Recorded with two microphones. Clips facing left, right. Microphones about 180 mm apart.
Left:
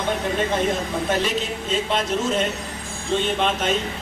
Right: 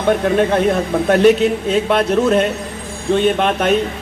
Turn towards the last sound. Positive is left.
turn(degrees=-60)  # may be behind; listen again after turning